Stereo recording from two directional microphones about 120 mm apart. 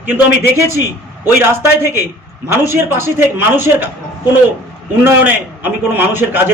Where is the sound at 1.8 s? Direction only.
20° right (ahead or behind).